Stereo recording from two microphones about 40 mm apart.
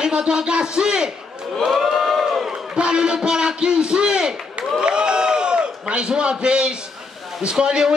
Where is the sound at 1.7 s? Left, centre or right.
Centre.